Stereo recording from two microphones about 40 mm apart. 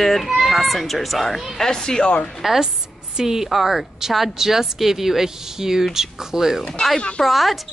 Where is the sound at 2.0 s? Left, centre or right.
Left.